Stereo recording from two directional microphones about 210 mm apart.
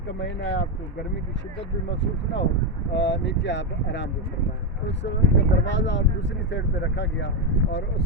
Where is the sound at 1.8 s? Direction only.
60° left (ahead or behind).